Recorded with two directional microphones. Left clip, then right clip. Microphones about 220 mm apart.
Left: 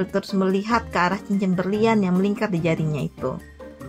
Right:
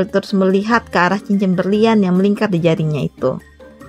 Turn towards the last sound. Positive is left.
turn(degrees=-30)  # may be behind; listen again after turning